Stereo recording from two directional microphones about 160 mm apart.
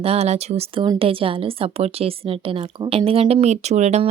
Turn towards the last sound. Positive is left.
turn(degrees=-45)  # may be behind; listen again after turning